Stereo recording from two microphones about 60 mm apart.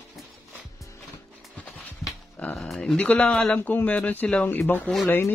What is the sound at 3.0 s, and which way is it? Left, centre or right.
Speech, centre.